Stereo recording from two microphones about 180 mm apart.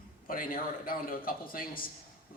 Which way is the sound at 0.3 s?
50° left (ahead or behind).